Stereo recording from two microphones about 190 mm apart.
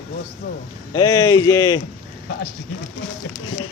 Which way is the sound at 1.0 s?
20° left (ahead or behind).